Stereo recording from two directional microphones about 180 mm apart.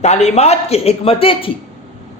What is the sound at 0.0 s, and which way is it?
A man's voice, 35° left (ahead or behind).